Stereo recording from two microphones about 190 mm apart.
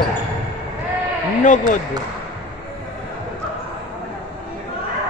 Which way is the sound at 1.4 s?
40° left (ahead or behind).